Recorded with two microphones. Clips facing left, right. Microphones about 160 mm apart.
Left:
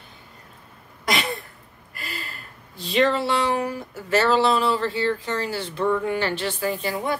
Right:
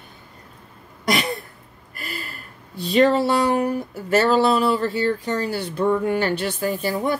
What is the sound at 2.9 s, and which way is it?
Speech, 40° right (ahead or behind).